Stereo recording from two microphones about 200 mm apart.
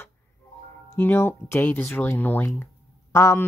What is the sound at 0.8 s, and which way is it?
Speech, 10° left (ahead or behind).